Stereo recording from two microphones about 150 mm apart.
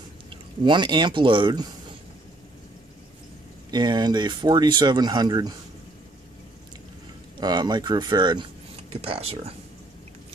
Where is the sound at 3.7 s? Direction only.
30° right (ahead or behind).